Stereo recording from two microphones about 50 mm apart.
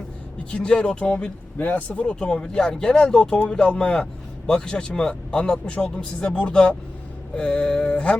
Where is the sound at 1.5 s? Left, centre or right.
Left.